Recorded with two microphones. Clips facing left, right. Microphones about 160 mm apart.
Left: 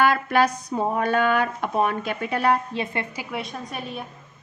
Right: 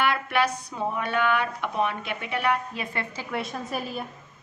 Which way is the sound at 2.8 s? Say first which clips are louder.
Left 3 dB; 20° left (ahead or behind).